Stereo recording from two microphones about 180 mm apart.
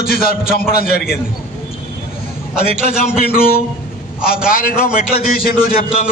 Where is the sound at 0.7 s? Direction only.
55° left (ahead or behind).